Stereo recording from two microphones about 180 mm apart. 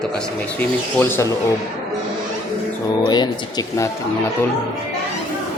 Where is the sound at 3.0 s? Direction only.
25° left (ahead or behind).